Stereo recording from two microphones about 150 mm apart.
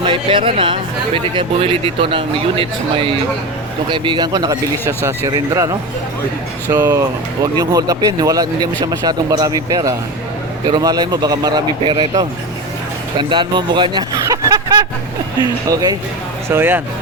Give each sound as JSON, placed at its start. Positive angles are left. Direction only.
{"t": 0.0, "sound": "speech", "side_deg": -35}
{"t": 13.1, "sound": "speech", "side_deg": -30}
{"t": 16.5, "sound": "speech", "side_deg": -15}